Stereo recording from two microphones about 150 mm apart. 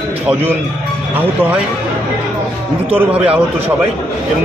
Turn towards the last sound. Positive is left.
turn(degrees=-10)  # may be behind; listen again after turning